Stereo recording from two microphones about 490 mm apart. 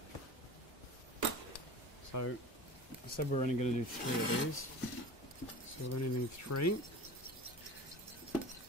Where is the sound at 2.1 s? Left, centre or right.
Left.